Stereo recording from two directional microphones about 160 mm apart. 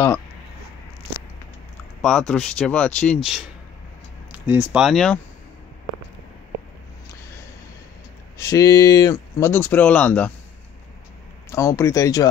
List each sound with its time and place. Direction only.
2.0 s speech: 5° left (ahead or behind)
4.3 s speech: 10° right (ahead or behind)
8.4 s speech: 20° left (ahead or behind)
11.5 s speech: 20° left (ahead or behind)